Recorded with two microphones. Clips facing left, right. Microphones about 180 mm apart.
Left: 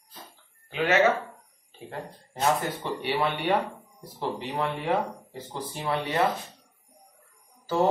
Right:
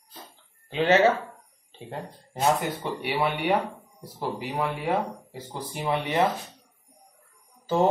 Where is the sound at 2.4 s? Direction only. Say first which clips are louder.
Right 1 dB; 15° right (ahead or behind).